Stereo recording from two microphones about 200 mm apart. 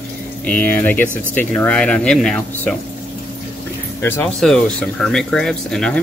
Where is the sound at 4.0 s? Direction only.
10° left (ahead or behind).